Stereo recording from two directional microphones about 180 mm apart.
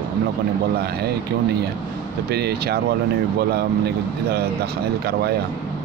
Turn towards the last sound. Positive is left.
turn(degrees=-65)  # may be behind; listen again after turning